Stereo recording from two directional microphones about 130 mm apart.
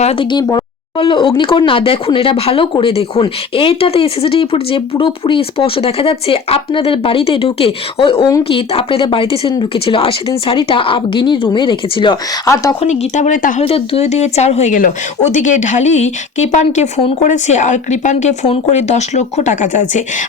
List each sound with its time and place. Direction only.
0.0 s speech: 55° left (ahead or behind)
0.3 s speech: 35° left (ahead or behind)
12.8 s speech: 60° left (ahead or behind); by 13.6 s 85° left
13.6 s speech: 50° left (ahead or behind); by 20.2 s 70° left (ahead or behind)